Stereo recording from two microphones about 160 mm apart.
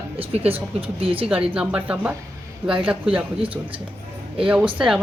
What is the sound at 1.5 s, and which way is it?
Speech, 5° right (ahead or behind).